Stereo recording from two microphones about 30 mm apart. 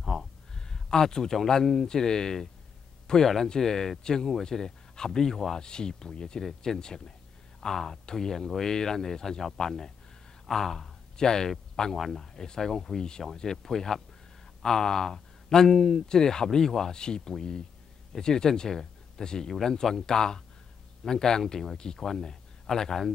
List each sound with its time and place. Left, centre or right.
0.1 s a sound: left
1.1 s speech: centre
5.6 s speech: left
13.3 s speech: centre